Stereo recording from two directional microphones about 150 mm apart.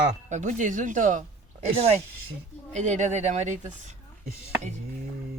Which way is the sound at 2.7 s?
55° right (ahead or behind).